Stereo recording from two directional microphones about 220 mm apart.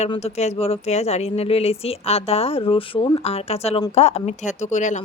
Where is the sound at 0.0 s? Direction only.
30° left (ahead or behind).